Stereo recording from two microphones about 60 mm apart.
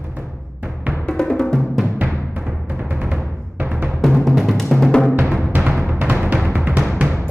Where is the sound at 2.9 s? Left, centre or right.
Centre.